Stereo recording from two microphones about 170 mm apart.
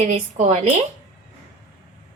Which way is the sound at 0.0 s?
40° right (ahead or behind).